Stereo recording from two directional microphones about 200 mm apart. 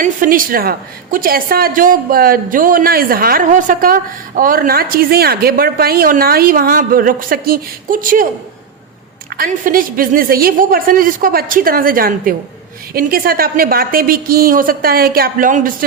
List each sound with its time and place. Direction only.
0.0 s a woman's voice: 45° right (ahead or behind)
9.3 s a woman's voice: 45° right (ahead or behind)